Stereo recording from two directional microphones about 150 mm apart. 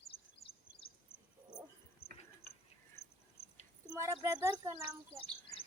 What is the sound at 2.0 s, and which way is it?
Insect, 90° left.